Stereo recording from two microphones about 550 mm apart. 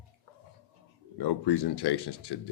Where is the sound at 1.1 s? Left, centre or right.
Left.